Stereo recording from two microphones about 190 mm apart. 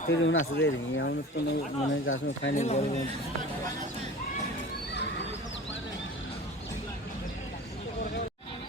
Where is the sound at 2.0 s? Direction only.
90° left.